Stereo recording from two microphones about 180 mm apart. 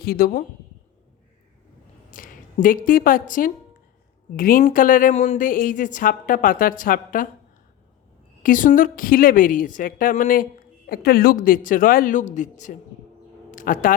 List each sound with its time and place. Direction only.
0.0 s speech: 55° left (ahead or behind)
2.0 s a woman's voice: 50° left (ahead or behind)
8.4 s a woman's voice: 50° left (ahead or behind)
13.5 s a sound: 50° left (ahead or behind)